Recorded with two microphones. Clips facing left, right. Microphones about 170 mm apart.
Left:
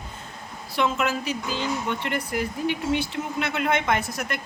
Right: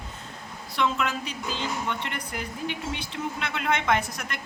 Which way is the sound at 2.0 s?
55° left (ahead or behind).